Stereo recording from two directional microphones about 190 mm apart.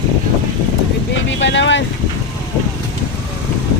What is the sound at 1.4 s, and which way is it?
Boat, 70° left (ahead or behind).